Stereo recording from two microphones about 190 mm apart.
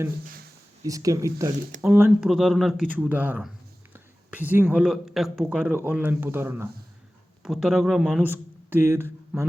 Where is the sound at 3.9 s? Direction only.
10° right (ahead or behind).